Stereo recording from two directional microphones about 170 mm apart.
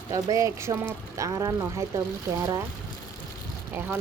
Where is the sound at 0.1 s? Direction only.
20° right (ahead or behind).